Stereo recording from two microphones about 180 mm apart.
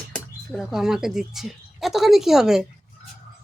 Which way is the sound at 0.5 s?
Centre (ahead or behind).